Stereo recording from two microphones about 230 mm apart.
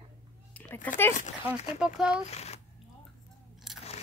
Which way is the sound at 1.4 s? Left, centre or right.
Centre.